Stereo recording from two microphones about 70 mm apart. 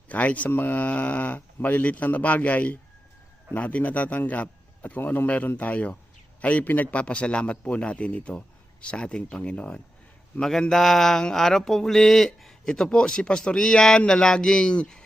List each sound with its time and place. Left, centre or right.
0.1 s a man's voice: left
6.4 s mantra: left